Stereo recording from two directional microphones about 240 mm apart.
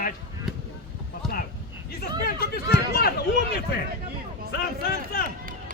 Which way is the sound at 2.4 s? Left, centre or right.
Left.